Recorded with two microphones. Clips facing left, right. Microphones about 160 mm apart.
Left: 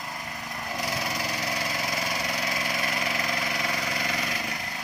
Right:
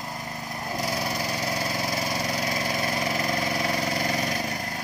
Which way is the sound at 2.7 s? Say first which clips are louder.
Right 3 dB; 30° right (ahead or behind).